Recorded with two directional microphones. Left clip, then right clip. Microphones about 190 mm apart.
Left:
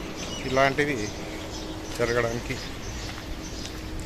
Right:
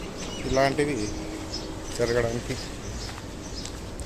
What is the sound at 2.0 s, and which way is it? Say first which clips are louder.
Speech: even; 10° right (ahead or behind).